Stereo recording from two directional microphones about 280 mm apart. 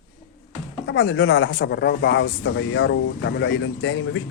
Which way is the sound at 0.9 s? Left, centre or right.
Left.